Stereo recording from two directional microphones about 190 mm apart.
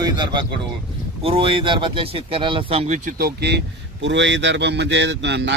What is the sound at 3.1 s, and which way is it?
Speech, 50° right (ahead or behind).